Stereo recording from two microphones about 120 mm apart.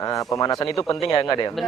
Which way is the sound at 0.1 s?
30° left (ahead or behind).